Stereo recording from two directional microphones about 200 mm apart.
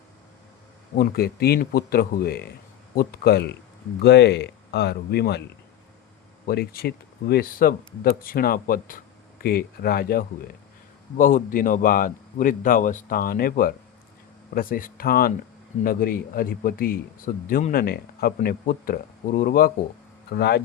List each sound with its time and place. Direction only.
0.9 s speech: 50° left (ahead or behind)
6.5 s speech: 50° left (ahead or behind)